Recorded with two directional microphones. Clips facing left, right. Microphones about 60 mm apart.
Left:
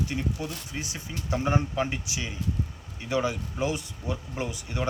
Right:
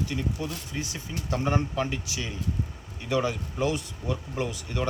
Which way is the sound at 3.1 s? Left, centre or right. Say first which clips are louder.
Right 1 dB; centre.